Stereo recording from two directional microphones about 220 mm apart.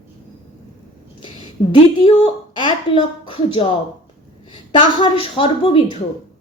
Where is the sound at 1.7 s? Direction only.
25° left (ahead or behind).